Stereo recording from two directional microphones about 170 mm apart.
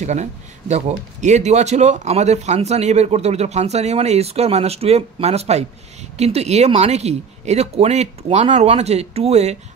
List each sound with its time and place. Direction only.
0.0 s speech: 45° right (ahead or behind)